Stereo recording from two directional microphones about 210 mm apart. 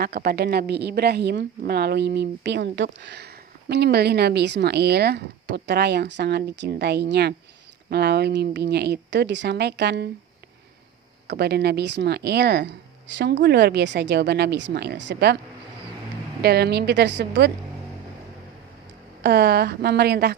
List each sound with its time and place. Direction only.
0.0 s a woman's voice: 45° right (ahead or behind)
11.3 s a woman's voice: 50° right (ahead or behind)
16.4 s a woman's voice: 50° right (ahead or behind)
19.2 s a woman's voice: 50° right (ahead or behind)